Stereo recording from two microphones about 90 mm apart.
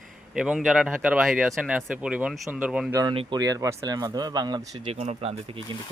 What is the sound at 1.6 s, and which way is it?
Speech, 15° right (ahead or behind).